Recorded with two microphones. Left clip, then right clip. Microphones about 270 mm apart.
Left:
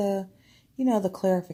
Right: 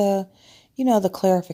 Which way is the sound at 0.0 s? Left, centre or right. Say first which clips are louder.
Right 7 dB; right.